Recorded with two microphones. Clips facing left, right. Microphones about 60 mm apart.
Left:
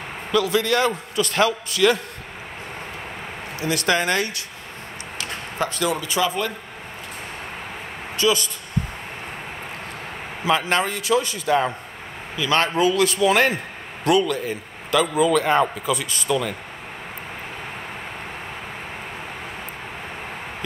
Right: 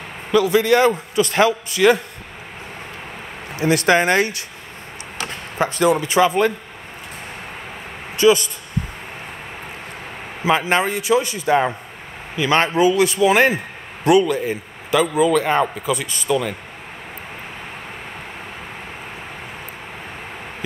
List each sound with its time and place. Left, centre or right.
0.3 s a man's voice: centre
3.5 s speech: right
5.6 s speech: right
8.2 s speech: right
10.4 s a man's voice: centre
12.7 s a man's voice: centre